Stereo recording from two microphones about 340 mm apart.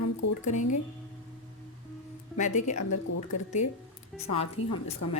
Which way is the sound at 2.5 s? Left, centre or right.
Left.